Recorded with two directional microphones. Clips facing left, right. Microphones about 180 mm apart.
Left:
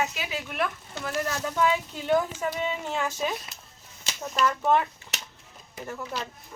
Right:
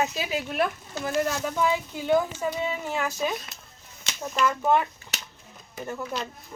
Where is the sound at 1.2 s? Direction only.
15° right (ahead or behind).